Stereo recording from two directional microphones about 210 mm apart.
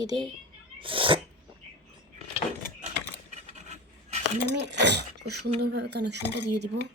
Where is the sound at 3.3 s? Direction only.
35° right (ahead or behind).